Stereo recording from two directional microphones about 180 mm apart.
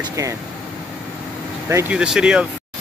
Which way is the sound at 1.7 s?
10° right (ahead or behind).